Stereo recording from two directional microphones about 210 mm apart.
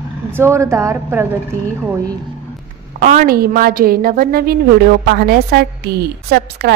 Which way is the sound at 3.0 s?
40° right (ahead or behind).